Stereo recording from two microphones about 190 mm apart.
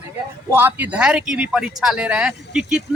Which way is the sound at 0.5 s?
10° right (ahead or behind).